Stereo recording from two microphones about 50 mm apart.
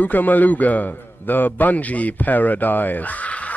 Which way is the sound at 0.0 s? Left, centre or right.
Left.